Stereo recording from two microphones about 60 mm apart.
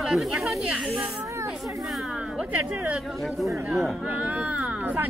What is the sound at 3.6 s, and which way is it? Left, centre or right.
Speech, right.